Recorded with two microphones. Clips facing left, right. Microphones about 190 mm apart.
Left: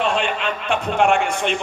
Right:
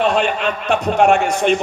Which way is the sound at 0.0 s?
40° right (ahead or behind).